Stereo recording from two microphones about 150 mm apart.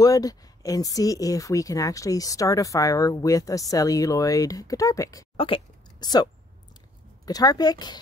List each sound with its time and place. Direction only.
0.0 s speech: 25° left (ahead or behind)
7.2 s speech: 25° left (ahead or behind)